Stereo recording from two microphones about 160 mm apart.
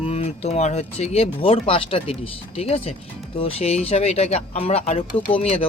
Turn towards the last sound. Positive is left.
turn(degrees=35)  # may be behind; listen again after turning